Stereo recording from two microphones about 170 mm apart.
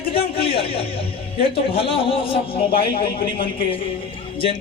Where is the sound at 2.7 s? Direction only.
60° left (ahead or behind).